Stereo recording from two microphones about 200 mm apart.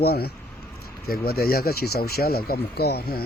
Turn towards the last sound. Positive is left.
turn(degrees=50)  # may be behind; listen again after turning